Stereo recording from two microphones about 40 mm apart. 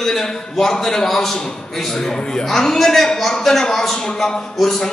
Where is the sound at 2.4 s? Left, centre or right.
Centre.